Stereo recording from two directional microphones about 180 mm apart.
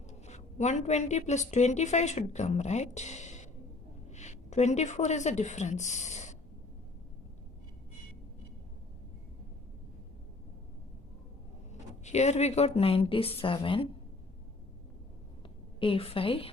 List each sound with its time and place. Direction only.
0.3 s a woman's voice: 40° left (ahead or behind)
11.7 s speech: 40° left (ahead or behind)
15.8 s a woman's voice: 30° left (ahead or behind)